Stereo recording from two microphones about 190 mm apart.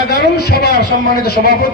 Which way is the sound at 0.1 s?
60° left (ahead or behind).